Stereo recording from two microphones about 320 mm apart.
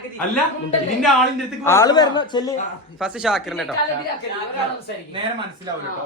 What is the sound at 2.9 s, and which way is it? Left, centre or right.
Speech, centre.